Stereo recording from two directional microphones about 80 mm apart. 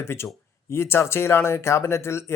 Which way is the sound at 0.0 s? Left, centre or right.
Left.